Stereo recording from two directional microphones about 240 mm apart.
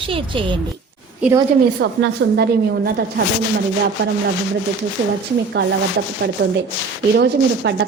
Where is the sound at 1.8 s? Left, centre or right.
Right.